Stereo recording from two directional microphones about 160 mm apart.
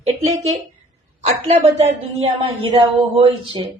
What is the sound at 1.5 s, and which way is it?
Speech, 40° right (ahead or behind).